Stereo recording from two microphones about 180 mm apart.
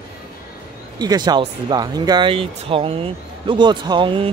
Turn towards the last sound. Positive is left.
turn(degrees=-30)  # may be behind; listen again after turning